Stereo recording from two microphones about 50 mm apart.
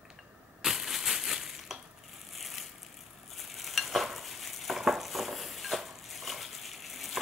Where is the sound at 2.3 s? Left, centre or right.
Centre.